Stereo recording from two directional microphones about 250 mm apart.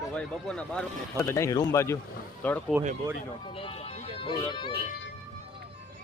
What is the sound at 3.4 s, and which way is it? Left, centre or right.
Speech, left.